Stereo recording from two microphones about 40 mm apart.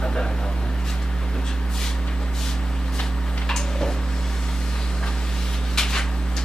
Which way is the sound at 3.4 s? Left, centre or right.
Centre.